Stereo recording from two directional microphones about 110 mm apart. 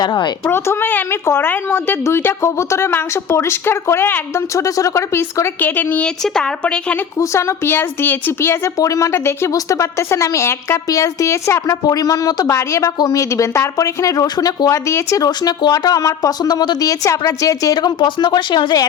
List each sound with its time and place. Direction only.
0.0 s speech: 40° left (ahead or behind)
0.4 s a woman's voice: 20° left (ahead or behind)
7.2 s a woman's voice: 25° left (ahead or behind)